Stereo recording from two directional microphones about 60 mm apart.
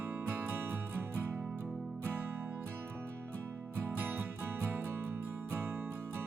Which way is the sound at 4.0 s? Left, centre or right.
Right.